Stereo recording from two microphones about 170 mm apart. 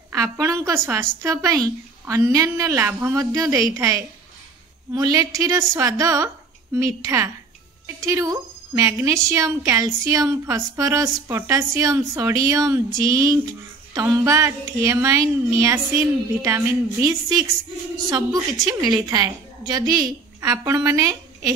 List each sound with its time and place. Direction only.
0.1 s a woman's voice: 20° right (ahead or behind)